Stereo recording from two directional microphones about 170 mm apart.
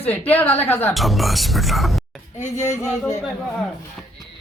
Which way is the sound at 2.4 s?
45° left (ahead or behind).